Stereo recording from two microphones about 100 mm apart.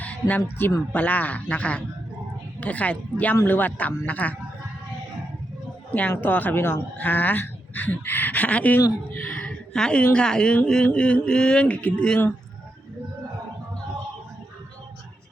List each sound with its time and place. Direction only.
0.0 s speech: 15° left (ahead or behind)
5.9 s speech: 15° left (ahead or behind)